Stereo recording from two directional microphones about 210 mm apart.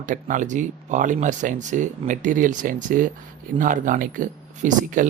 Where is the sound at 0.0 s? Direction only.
40° right (ahead or behind).